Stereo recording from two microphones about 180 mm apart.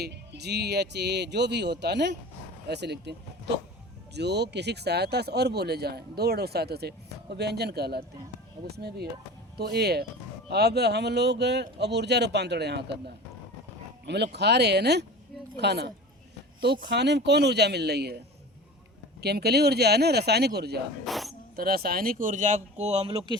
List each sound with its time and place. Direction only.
0.0 s speech: 65° right (ahead or behind)
19.2 s speech: 65° right (ahead or behind)
21.0 s speech: centre (ahead or behind)
21.5 s speech: 55° right (ahead or behind); by 23.4 s 30° right (ahead or behind)